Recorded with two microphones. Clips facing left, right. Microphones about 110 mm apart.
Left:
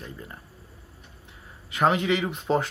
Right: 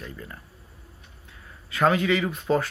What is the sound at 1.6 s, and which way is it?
Speech, 20° left (ahead or behind).